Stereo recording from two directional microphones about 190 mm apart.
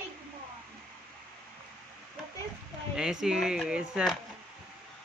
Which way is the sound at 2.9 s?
5° right (ahead or behind).